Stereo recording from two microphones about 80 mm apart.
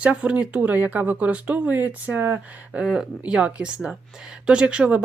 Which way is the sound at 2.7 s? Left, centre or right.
Centre.